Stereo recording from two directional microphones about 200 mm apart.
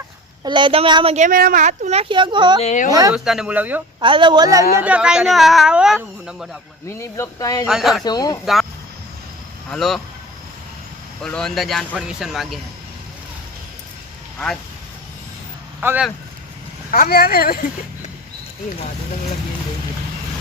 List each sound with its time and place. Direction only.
0.4 s a woman's voice: 25° right (ahead or behind)
2.6 s speech: 35° left (ahead or behind)
2.9 s speech: 15° right (ahead or behind)
3.2 s speech: 5° right (ahead or behind)
4.0 s a woman's voice: 25° right (ahead or behind)
4.8 s speech: 5° right (ahead or behind)
6.8 s speech: 15° left (ahead or behind)
7.7 s speech: centre (ahead or behind)
8.0 s speech: 20° left (ahead or behind)
9.6 s speech: centre (ahead or behind)
11.2 s speech: 5° left (ahead or behind)
14.3 s speech: 5° left (ahead or behind)
15.8 s speech: 10° right (ahead or behind)
16.9 s speech: 45° left (ahead or behind)